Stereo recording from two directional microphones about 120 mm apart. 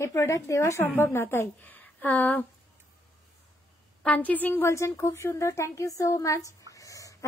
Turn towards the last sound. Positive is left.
turn(degrees=30)  # may be behind; listen again after turning